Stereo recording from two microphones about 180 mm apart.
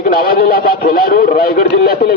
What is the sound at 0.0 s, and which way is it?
Speech, 50° left (ahead or behind).